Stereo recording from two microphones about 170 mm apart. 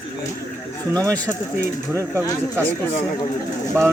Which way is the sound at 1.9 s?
15° right (ahead or behind).